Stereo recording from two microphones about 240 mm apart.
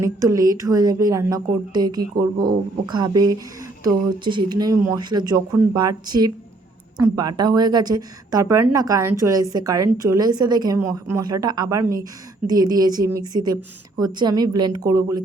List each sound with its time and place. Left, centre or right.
0.0 s a woman's voice: centre